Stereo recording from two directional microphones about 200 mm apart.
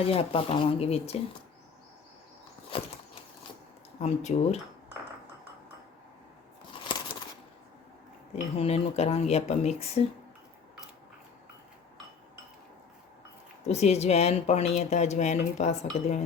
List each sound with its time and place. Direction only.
0.0 s speech: 30° left (ahead or behind)
2.7 s a sound: 25° left (ahead or behind)
4.0 s speech: 35° left (ahead or behind)
8.5 s speech: 30° left (ahead or behind)
13.7 s speech: 35° left (ahead or behind)